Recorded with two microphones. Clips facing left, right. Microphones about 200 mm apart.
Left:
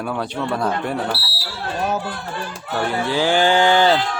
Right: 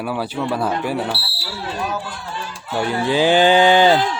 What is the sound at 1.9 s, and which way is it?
Speech, 45° left (ahead or behind).